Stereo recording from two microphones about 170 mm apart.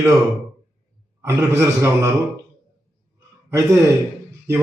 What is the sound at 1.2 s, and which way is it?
Speech, 15° right (ahead or behind).